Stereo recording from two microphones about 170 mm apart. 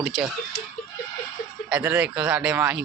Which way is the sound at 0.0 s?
Centre (ahead or behind).